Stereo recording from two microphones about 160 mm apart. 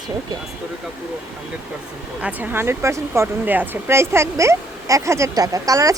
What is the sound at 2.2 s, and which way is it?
Speech, 10° right (ahead or behind).